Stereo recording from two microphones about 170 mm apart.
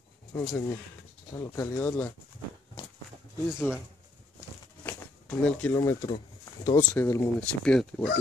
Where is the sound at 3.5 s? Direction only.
5° right (ahead or behind).